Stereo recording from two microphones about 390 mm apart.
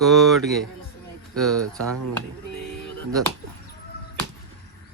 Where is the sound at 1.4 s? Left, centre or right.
Centre.